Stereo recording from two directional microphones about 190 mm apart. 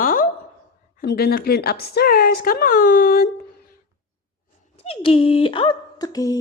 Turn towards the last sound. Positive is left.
turn(degrees=20)  # may be behind; listen again after turning